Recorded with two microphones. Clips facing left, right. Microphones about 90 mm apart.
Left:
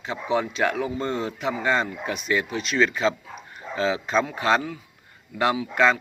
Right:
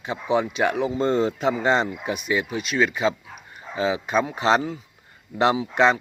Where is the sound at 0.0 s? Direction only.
15° right (ahead or behind).